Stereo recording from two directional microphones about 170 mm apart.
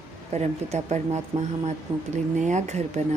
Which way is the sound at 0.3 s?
40° right (ahead or behind).